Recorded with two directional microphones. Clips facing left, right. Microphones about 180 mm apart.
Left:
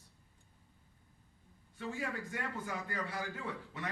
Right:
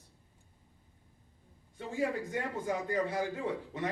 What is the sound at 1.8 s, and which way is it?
A man's voice, 25° right (ahead or behind).